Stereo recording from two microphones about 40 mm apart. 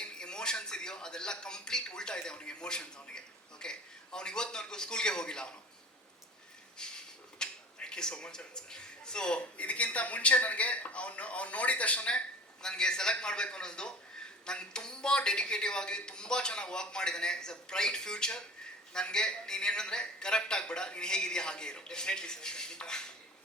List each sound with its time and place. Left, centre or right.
0.0 s a sound: left
2.5 s a man's voice: left
6.7 s a sound: centre
8.1 s speech: left
9.6 s speech: left
12.6 s a man's voice: centre